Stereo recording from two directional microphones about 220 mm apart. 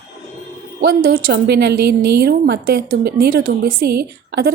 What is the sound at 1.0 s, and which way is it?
A woman's voice, 45° right (ahead or behind).